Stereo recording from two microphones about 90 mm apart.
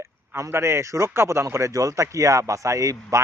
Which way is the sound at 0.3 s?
30° right (ahead or behind).